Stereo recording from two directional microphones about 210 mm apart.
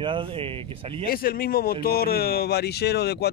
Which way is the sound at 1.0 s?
45° left (ahead or behind).